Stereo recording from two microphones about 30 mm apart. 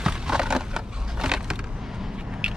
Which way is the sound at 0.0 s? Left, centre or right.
Right.